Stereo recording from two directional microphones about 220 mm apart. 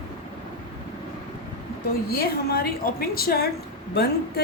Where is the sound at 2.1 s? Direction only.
45° left (ahead or behind).